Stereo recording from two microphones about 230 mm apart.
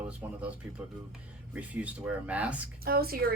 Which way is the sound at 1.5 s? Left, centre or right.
Centre.